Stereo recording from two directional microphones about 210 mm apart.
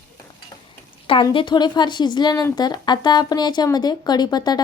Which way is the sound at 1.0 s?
25° left (ahead or behind).